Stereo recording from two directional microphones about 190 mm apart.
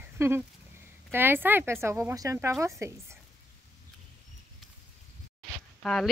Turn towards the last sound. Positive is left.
turn(degrees=5)  # may be behind; listen again after turning